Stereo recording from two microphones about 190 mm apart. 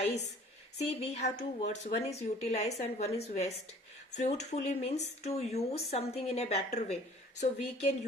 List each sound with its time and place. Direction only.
0.8 s speech: 35° left (ahead or behind)